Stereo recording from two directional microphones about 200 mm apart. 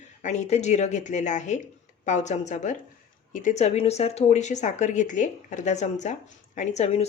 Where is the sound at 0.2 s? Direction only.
35° left (ahead or behind).